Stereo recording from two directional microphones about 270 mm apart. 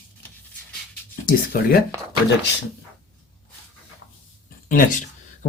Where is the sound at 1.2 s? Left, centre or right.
Left.